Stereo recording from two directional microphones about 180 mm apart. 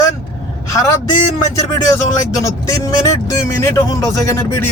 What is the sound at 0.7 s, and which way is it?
Speech, 15° left (ahead or behind).